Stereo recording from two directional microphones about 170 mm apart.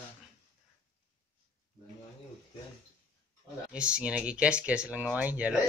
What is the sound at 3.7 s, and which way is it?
Speech, 5° right (ahead or behind).